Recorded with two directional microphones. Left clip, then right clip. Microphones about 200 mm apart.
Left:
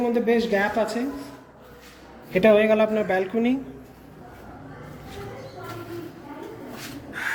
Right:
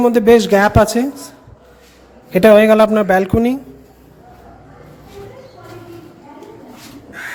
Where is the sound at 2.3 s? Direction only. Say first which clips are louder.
Right 9 dB; 45° right (ahead or behind).